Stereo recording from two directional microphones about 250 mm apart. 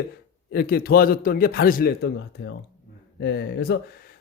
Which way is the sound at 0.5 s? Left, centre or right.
Left.